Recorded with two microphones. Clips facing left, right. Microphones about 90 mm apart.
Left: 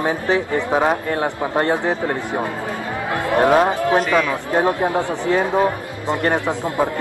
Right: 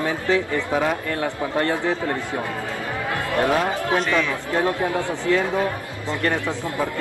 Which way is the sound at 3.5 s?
35° left (ahead or behind).